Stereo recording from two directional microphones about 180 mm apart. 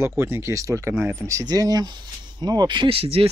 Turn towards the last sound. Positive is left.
turn(degrees=-30)  # may be behind; listen again after turning